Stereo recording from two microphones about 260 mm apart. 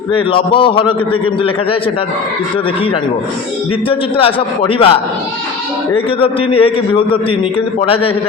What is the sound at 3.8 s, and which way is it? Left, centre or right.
A man's voice, left.